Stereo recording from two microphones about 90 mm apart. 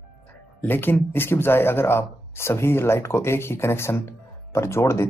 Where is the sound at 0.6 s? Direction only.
20° left (ahead or behind).